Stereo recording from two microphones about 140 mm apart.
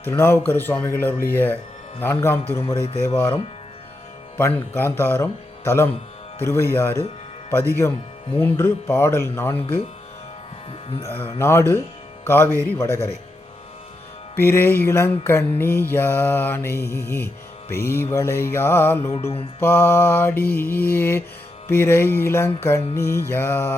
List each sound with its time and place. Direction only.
0.0 s mantra: 15° left (ahead or behind)
2.5 s a man's voice: 20° left (ahead or behind)
2.8 s speech: 45° left (ahead or behind)
4.4 s mantra: 15° left (ahead or behind)
7.8 s a man's voice: 20° left (ahead or behind)
8.4 s mantra: 15° left (ahead or behind)
11.0 s mantra: 15° left (ahead or behind)
14.3 s mantra: 15° left (ahead or behind)